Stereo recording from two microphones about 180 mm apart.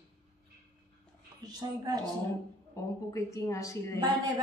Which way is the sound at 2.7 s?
15° left (ahead or behind).